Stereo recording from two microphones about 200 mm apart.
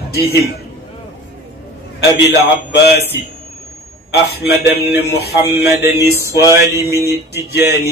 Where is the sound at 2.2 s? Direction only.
55° left (ahead or behind).